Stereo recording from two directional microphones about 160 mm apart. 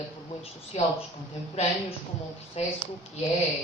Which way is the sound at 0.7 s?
40° left (ahead or behind).